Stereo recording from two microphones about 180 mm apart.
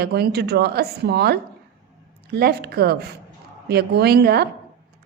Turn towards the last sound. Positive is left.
turn(degrees=-60)  # may be behind; listen again after turning